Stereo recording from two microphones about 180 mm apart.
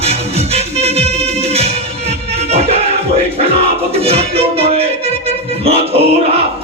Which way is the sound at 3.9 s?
35° right (ahead or behind).